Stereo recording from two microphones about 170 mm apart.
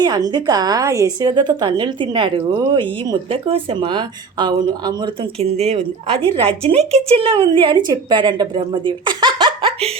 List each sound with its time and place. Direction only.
0.0 s a woman's voice: 25° right (ahead or behind)
5.4 s a woman's voice: 40° right (ahead or behind)